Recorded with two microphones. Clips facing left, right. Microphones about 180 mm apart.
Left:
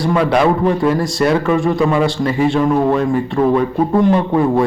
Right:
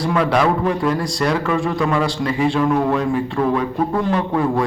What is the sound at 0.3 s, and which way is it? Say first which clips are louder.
A man's voice: left 4 dB; 25° left (ahead or behind).